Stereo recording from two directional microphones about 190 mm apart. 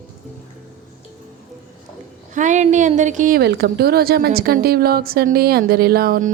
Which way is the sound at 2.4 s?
40° right (ahead or behind).